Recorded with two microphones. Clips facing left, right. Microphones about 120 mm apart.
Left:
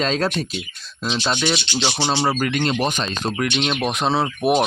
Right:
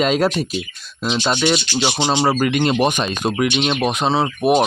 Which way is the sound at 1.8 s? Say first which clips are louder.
Right 3 dB; 15° right (ahead or behind).